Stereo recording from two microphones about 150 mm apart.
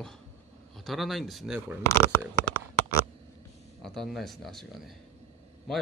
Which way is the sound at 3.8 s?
Centre (ahead or behind).